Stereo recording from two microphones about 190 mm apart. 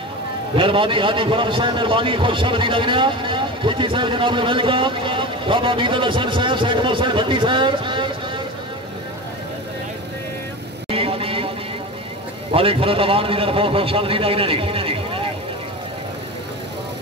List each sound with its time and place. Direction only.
0.6 s a man's voice: 25° right (ahead or behind)
10.9 s vehicle: 30° right (ahead or behind)
12.5 s a man's voice: 30° right (ahead or behind)